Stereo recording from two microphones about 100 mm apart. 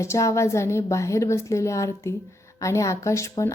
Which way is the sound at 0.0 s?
30° left (ahead or behind).